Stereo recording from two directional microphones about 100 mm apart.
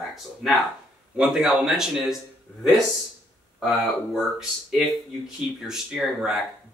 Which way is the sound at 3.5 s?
Centre (ahead or behind).